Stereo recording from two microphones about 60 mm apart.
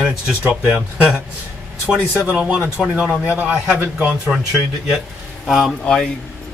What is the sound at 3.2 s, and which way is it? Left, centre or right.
Speech, right.